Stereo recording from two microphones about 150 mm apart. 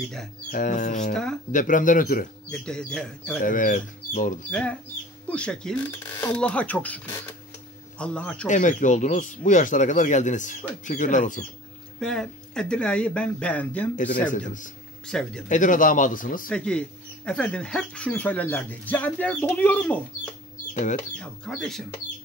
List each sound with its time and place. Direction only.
0.5 s speech: 65° left (ahead or behind)
1.1 s speech: 5° left (ahead or behind)
1.5 s speech: 60° left (ahead or behind)
2.5 s speech: 5° left (ahead or behind)
3.4 s speech: 60° left (ahead or behind)
4.5 s speech: 10° left (ahead or behind)
8.0 s speech: 5° left (ahead or behind)
8.5 s speech: 55° left (ahead or behind)
12.0 s speech: 5° left (ahead or behind)
14.3 s speech: 60° left (ahead or behind)
15.0 s speech: 5° left (ahead or behind)
15.4 s speech: 60° left (ahead or behind)
16.4 s speech: 5° left (ahead or behind)
21.2 s speech: 5° left (ahead or behind)